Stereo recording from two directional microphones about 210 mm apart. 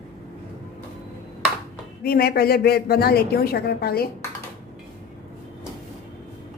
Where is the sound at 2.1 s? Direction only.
45° left (ahead or behind).